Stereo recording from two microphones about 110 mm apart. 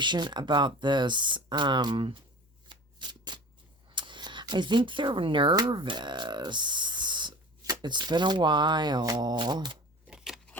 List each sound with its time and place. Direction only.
0.0 s speech: 45° right (ahead or behind)
2.6 s shuffling cards: 40° right (ahead or behind)
3.8 s speech: 45° right (ahead or behind)
10.1 s a sound: 5° right (ahead or behind)